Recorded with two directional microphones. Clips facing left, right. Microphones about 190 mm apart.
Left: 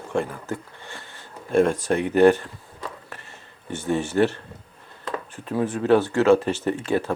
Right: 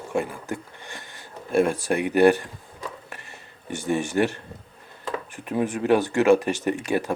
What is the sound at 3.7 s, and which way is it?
Speech, 10° right (ahead or behind).